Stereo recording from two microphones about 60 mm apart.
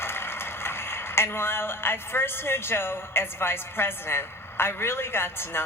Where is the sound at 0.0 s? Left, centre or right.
Left.